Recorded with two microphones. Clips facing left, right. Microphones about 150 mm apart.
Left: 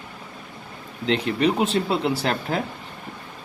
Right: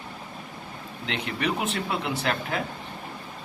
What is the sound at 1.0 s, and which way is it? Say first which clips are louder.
Speech: left 8 dB; 35° left (ahead or behind).